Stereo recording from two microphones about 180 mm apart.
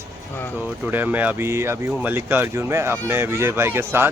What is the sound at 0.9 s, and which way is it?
A man's voice, 10° right (ahead or behind).